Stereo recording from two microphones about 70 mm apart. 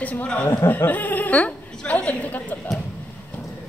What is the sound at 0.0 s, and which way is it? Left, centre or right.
A woman's voice, left.